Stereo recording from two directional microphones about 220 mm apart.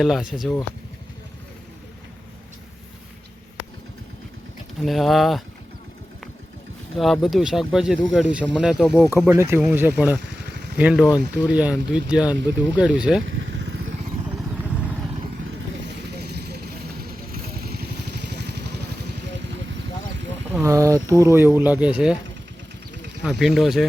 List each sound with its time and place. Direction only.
0.0 s speech: centre (ahead or behind)
4.8 s speech: centre (ahead or behind)
6.9 s speech: centre (ahead or behind)
10.2 s vehicle: 50° right (ahead or behind)
10.8 s speech: 5° right (ahead or behind)
13.2 s vehicle: 55° right (ahead or behind)
14.3 s vehicle: 5° right (ahead or behind)
16.2 s vehicle: 50° right (ahead or behind)
20.5 s speech: 10° right (ahead or behind)
23.2 s speech: centre (ahead or behind)